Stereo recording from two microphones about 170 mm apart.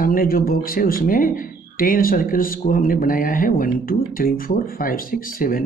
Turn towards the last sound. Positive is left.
turn(degrees=55)  # may be behind; listen again after turning